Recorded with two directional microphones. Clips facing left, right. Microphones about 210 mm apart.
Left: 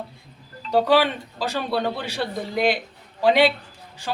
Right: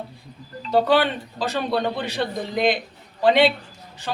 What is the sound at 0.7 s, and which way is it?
A man's voice, 10° left (ahead or behind).